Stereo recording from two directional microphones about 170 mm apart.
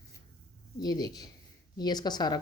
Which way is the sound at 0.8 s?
25° left (ahead or behind).